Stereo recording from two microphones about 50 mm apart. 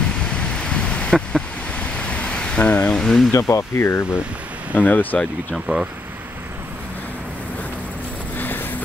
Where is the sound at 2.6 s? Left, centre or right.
Left.